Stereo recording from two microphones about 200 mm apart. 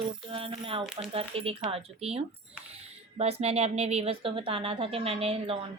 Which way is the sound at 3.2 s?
30° right (ahead or behind).